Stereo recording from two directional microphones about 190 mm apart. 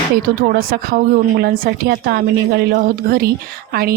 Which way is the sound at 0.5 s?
55° right (ahead or behind).